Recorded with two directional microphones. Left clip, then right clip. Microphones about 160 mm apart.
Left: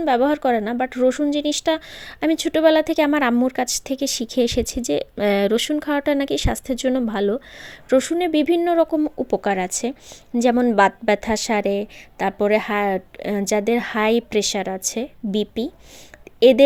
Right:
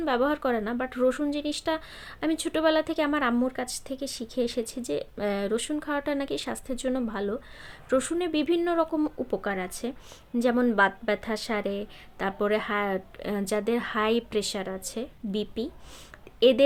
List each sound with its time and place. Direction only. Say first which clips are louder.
0.0 s a woman's voice: left 8 dB; 40° left (ahead or behind)